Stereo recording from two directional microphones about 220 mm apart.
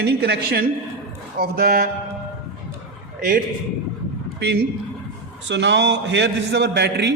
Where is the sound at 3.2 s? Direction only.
40° right (ahead or behind).